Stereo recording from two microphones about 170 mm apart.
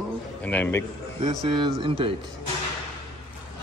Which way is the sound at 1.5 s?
30° right (ahead or behind).